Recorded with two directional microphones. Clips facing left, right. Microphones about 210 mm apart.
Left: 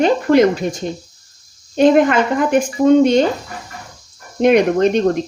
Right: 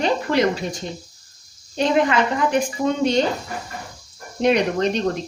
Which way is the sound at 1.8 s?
50° left (ahead or behind).